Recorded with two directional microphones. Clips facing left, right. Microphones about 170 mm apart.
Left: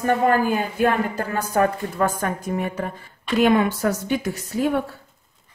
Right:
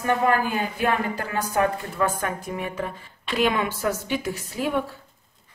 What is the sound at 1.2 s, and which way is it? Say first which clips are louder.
A woman's voice: left 3 dB; 40° left (ahead or behind).